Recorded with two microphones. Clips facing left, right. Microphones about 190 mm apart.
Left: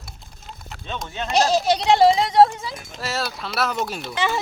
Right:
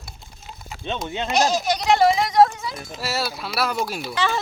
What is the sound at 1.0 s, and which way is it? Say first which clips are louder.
Speech: right 1 dB; 20° right (ahead or behind).